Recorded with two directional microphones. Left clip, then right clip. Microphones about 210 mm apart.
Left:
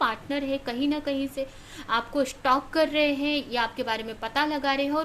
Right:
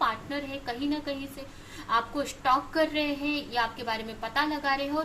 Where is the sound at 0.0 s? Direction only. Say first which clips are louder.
Left 2 dB; 40° left (ahead or behind).